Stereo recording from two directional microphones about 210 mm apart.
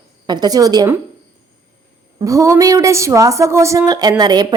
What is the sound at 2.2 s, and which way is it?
A woman's voice, 15° right (ahead or behind).